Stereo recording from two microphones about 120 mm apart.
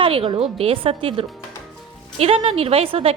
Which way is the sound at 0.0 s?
45° right (ahead or behind).